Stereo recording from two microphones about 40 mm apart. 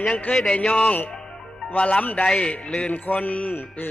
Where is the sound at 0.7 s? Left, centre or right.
Left.